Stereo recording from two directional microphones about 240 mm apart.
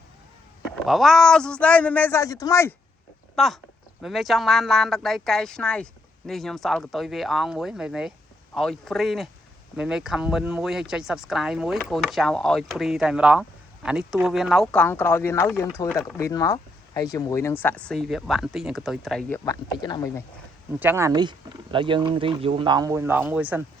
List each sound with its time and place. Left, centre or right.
0.9 s speech: centre
3.3 s speech: centre
19.5 s speech: centre
20.7 s speech: centre